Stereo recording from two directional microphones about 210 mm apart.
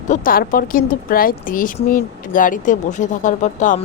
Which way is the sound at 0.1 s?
40° left (ahead or behind).